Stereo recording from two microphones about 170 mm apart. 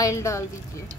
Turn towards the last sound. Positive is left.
turn(degrees=15)  # may be behind; listen again after turning